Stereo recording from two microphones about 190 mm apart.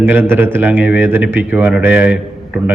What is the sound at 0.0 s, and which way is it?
A man's voice, 10° right (ahead or behind).